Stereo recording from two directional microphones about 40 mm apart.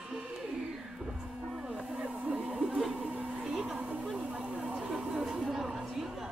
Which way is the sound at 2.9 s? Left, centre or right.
Right.